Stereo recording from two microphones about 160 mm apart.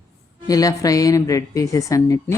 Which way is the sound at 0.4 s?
20° left (ahead or behind).